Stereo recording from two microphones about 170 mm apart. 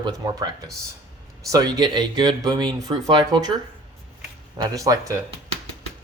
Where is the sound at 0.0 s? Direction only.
25° right (ahead or behind).